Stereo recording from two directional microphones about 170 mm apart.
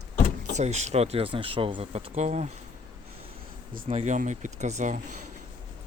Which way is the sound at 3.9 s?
40° right (ahead or behind).